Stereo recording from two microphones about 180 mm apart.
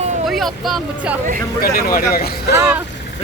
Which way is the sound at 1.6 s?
55° left (ahead or behind).